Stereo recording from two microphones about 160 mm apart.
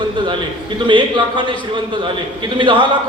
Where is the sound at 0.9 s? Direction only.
30° right (ahead or behind).